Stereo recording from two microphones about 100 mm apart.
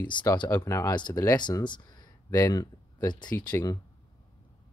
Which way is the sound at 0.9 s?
45° left (ahead or behind).